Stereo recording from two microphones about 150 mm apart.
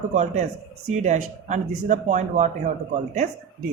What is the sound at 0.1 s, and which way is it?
A man's voice, 50° right (ahead or behind).